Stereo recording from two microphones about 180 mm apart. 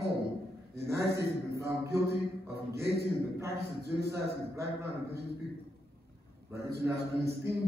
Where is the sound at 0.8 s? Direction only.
15° right (ahead or behind).